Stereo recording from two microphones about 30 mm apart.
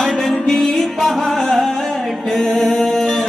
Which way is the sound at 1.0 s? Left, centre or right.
Centre.